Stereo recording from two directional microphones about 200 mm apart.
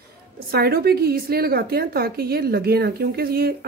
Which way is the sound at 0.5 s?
50° right (ahead or behind).